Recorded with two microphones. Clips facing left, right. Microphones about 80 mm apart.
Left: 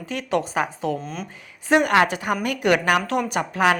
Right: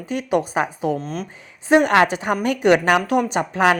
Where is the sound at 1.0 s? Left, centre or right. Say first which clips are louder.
Right 4 dB; centre.